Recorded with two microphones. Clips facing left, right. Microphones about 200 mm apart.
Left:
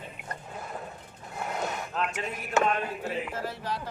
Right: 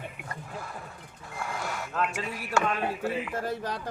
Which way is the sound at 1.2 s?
20° left (ahead or behind).